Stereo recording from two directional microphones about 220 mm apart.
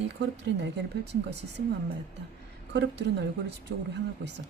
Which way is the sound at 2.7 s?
50° right (ahead or behind).